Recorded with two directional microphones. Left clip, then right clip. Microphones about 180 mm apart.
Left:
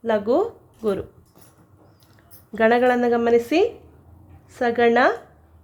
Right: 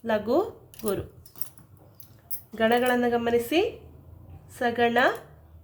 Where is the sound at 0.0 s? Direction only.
40° left (ahead or behind).